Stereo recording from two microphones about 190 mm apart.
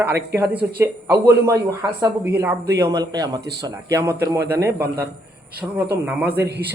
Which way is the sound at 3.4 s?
60° right (ahead or behind).